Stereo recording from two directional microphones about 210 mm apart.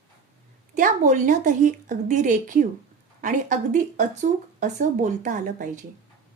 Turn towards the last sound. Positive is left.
turn(degrees=-40)  # may be behind; listen again after turning